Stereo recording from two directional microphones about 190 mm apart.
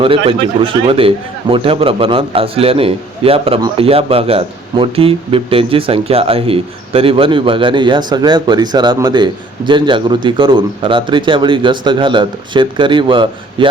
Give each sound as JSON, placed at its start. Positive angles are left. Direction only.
{"t": 0.0, "sound": "a man's voice", "side_deg": -30}